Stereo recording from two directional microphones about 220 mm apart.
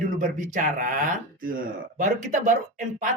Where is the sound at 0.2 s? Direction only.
35° right (ahead or behind).